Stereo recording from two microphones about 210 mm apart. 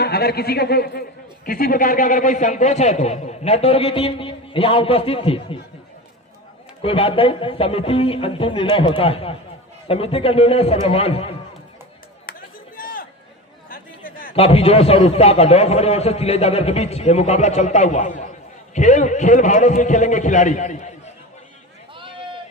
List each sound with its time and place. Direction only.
0.0 s a man's voice: 50° left (ahead or behind); by 5.5 s 25° left (ahead or behind)
6.8 s a man's voice: 25° left (ahead or behind)
12.3 s a sound: 45° left (ahead or behind)
13.7 s chatter: 40° left (ahead or behind)
14.3 s a man's voice: 30° left (ahead or behind)